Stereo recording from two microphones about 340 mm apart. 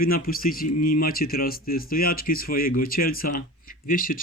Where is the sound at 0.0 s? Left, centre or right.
Left.